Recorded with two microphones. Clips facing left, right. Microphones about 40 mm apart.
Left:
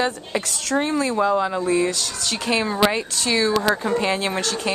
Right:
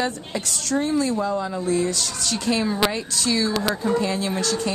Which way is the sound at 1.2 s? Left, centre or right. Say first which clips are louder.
Left 5 dB; left.